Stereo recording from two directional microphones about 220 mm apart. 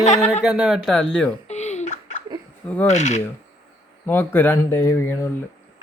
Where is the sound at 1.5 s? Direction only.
30° left (ahead or behind).